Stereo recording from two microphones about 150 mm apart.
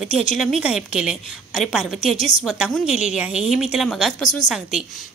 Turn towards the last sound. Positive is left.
turn(degrees=-5)  # may be behind; listen again after turning